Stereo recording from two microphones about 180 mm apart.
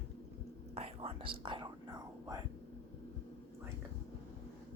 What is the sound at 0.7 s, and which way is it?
Whispering, 35° right (ahead or behind).